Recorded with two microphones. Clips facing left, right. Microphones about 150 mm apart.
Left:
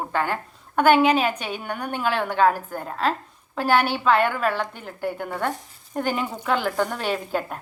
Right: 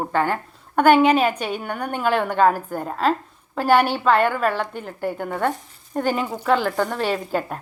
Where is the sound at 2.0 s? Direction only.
5° right (ahead or behind).